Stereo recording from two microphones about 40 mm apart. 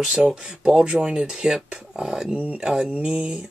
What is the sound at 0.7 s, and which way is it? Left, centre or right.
Speech, centre.